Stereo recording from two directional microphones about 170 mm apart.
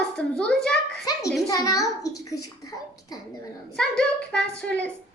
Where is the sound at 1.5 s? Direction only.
20° left (ahead or behind).